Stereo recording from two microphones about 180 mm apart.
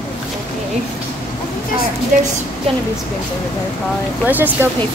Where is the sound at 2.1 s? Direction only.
50° right (ahead or behind).